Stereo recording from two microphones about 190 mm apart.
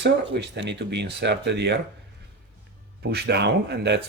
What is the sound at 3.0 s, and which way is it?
Speech, 60° right (ahead or behind).